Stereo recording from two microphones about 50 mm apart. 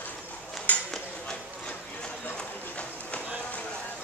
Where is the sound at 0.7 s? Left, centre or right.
Left.